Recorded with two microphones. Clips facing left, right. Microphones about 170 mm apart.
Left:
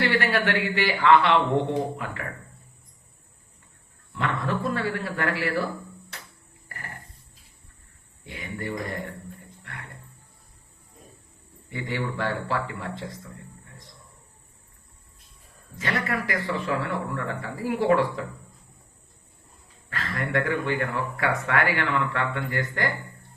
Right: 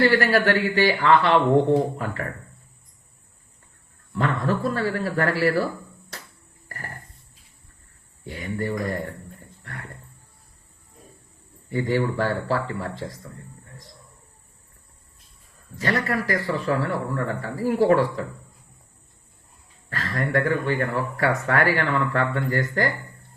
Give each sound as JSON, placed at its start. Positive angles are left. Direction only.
{"t": 0.0, "sound": "speech", "side_deg": -40}
{"t": 4.1, "sound": "speech", "side_deg": -40}
{"t": 8.2, "sound": "speech", "side_deg": -40}
{"t": 11.7, "sound": "speech", "side_deg": -40}
{"t": 15.8, "sound": "speech", "side_deg": -40}
{"t": 19.9, "sound": "speech", "side_deg": -40}